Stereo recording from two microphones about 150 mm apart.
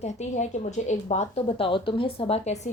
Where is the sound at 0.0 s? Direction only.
50° left (ahead or behind).